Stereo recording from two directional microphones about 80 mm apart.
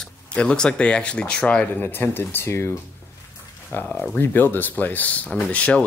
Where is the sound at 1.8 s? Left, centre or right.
Left.